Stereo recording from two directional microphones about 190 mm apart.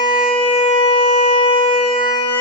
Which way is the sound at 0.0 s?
25° left (ahead or behind).